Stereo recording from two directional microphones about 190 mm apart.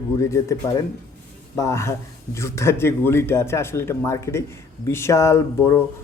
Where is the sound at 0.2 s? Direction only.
15° left (ahead or behind).